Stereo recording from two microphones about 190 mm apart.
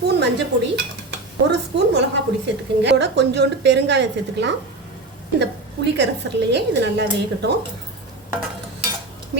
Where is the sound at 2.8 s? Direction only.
65° right (ahead or behind).